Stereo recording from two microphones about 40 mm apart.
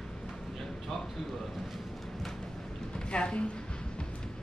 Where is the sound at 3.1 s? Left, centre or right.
Left.